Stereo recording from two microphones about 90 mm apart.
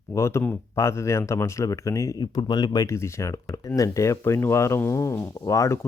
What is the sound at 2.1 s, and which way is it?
Speech, 55° left (ahead or behind).